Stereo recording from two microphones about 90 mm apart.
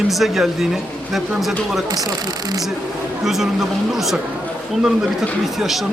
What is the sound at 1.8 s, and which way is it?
Speech, 45° right (ahead or behind).